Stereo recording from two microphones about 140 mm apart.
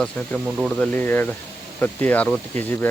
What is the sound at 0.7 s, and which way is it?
Speech, 10° left (ahead or behind).